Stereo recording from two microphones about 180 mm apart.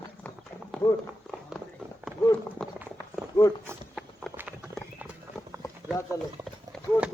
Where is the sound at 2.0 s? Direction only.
10° right (ahead or behind).